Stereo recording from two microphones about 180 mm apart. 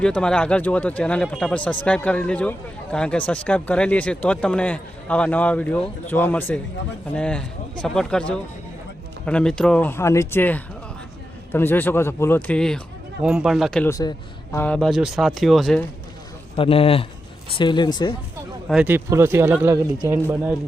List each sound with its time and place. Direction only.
0.0 s speech: 5° left (ahead or behind)
13.9 s a man's voice: 20° left (ahead or behind)
14.6 s speech: 5° left (ahead or behind)
16.6 s a man's voice: 30° left (ahead or behind)
18.7 s speech: 10° right (ahead or behind)